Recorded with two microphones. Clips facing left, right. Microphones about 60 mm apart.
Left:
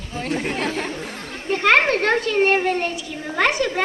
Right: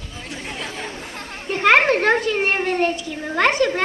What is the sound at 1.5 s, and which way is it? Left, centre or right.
A child's voice, centre.